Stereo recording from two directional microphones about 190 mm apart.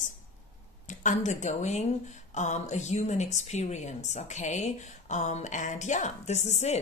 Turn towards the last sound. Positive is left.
turn(degrees=35)  # may be behind; listen again after turning